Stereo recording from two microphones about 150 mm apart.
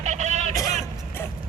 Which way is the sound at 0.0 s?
50° right (ahead or behind).